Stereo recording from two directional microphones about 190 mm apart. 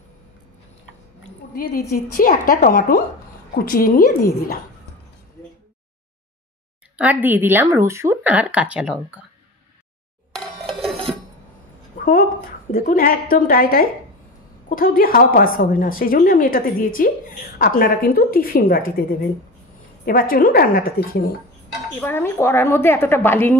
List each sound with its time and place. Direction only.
1.5 s a woman's voice: 50° left (ahead or behind)
7.0 s speech: 10° right (ahead or behind)
10.3 s a sound: centre (ahead or behind)
12.0 s a sound: 50° left (ahead or behind)
12.7 s a woman's voice: 50° left (ahead or behind)
20.1 s a woman's voice: 50° left (ahead or behind)
22.0 s a woman's voice: 10° left (ahead or behind)